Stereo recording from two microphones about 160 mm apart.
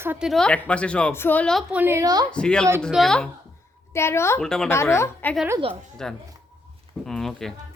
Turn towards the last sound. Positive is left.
turn(degrees=0)  # may be behind; listen again after turning